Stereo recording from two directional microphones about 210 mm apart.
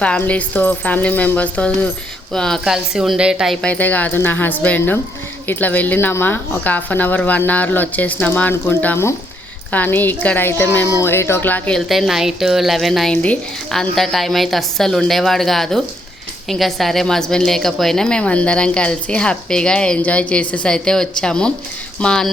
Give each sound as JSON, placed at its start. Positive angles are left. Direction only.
{"t": 0.0, "sound": "a woman's voice", "side_deg": 5}